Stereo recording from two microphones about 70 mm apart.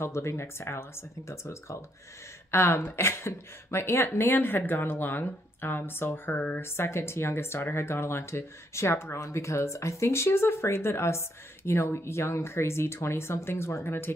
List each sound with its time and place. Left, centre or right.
0.0 s speech: left
6.6 s speech: left